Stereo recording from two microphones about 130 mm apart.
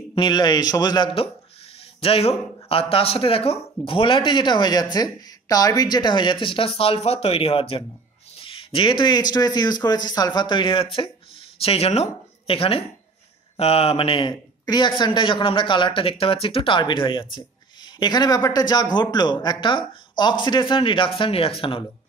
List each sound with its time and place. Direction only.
0.1 s speech: 35° left (ahead or behind)
8.4 s a sound: 45° left (ahead or behind)
9.3 s speech: 30° left (ahead or behind)